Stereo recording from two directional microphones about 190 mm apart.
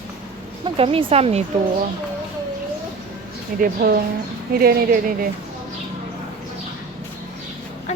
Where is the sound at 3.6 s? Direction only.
50° right (ahead or behind).